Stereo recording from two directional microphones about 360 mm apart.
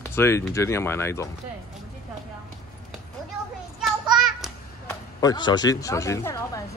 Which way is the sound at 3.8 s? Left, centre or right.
Centre.